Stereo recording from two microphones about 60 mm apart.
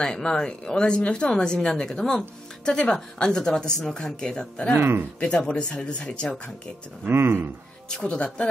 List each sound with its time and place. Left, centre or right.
0.0 s speech: centre
4.7 s speech: right
5.2 s speech: centre
7.1 s speech: right
7.9 s speech: centre